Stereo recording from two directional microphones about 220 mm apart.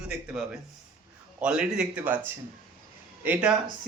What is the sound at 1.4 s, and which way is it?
A man's voice, 5° right (ahead or behind).